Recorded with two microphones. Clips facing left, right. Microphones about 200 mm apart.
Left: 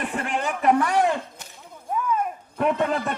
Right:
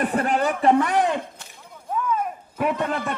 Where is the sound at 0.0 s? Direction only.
40° right (ahead or behind).